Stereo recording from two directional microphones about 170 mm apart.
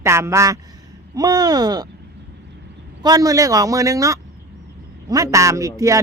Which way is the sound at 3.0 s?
20° right (ahead or behind).